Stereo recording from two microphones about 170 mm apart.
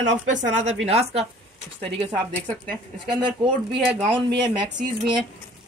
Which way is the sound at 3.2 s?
30° right (ahead or behind).